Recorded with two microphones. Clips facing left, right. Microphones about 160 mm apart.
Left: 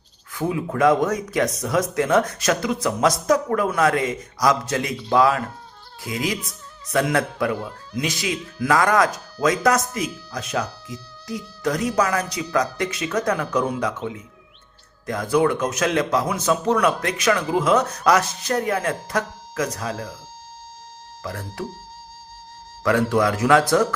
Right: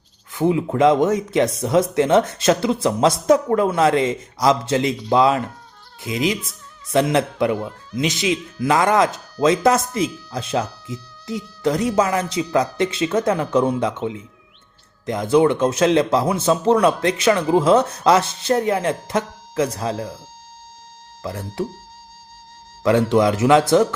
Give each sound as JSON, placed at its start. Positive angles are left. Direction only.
{"t": 0.3, "sound": "a man's voice", "side_deg": -25}
{"t": 21.2, "sound": "a man's voice", "side_deg": -25}
{"t": 22.8, "sound": "a man's voice", "side_deg": -20}